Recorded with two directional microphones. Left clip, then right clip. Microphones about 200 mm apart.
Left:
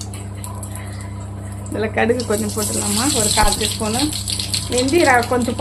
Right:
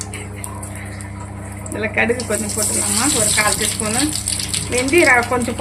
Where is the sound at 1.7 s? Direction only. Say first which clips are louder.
Even; 20° left (ahead or behind).